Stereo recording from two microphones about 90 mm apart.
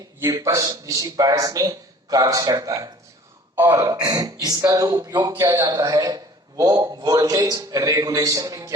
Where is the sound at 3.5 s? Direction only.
25° right (ahead or behind).